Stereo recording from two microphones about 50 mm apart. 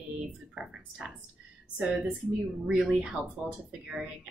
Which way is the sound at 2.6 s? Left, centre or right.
Centre.